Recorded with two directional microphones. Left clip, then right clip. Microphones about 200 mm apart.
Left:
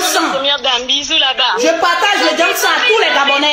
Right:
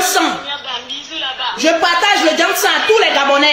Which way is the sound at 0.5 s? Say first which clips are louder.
Left 9 dB; 55° left (ahead or behind).